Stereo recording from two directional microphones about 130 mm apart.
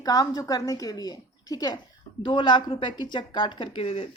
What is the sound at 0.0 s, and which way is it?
A woman's voice, 30° left (ahead or behind).